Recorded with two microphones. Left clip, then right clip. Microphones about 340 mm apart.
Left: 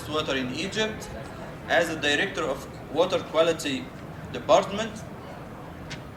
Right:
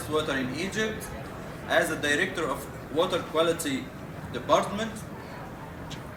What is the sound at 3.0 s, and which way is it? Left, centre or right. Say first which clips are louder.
Speech: left 2 dB; left.